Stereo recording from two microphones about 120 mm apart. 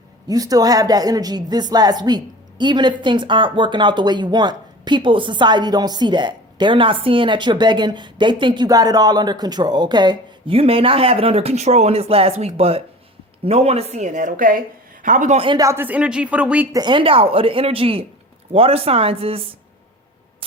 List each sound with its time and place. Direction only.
0.3 s speech: 30° right (ahead or behind); by 15.4 s 90° right
15.5 s speech: 25° right (ahead or behind)
16.7 s speech: 40° right (ahead or behind)